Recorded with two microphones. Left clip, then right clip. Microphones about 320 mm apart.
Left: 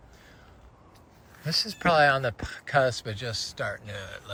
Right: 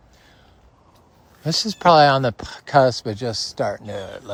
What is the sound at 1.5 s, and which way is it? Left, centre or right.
Speech, centre.